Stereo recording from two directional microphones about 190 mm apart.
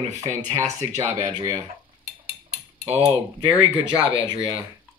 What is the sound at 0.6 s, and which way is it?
Speech, 15° right (ahead or behind).